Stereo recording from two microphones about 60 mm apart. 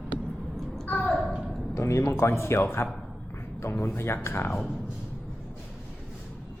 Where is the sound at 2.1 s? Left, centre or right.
Left.